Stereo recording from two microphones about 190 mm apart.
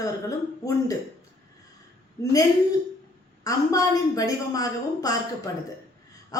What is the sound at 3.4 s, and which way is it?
A woman's voice, 20° left (ahead or behind).